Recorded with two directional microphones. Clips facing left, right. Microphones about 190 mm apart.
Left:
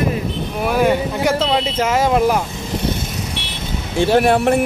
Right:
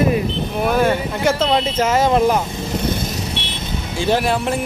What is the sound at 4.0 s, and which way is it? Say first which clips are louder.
Speech: left 5 dB; 60° left (ahead or behind).